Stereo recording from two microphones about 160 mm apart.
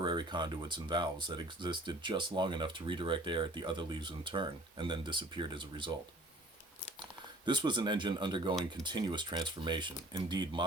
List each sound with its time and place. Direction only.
0.0 s speech: 30° right (ahead or behind)
7.4 s speech: 30° right (ahead or behind)